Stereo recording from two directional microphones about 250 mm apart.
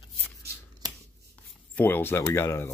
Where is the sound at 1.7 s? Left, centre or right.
Centre.